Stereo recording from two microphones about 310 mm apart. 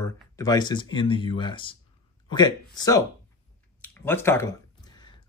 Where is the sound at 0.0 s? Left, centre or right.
Centre.